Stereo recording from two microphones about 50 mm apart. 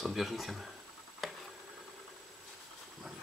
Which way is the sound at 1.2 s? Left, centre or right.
Centre.